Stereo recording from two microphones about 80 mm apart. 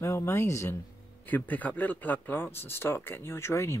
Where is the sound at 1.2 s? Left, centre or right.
Left.